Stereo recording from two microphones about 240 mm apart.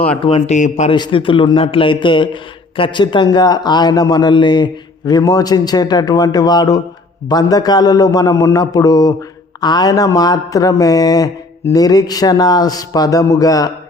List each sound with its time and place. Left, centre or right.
0.2 s a man's voice: left